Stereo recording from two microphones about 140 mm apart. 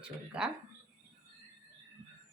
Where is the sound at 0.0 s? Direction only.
5° right (ahead or behind).